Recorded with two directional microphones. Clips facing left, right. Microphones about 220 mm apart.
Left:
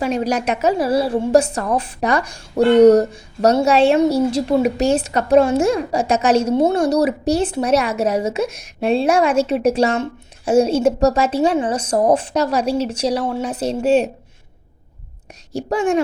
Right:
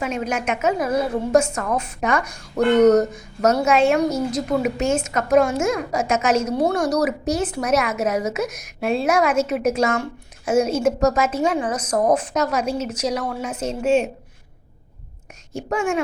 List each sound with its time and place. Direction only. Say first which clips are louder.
0.0 s a woman's voice: left 5 dB; 35° left (ahead or behind)
15.5 s a woman's voice: left 4 dB; 35° left (ahead or behind)